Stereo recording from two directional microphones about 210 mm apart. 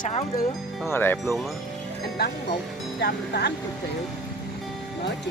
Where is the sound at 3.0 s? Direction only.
50° left (ahead or behind).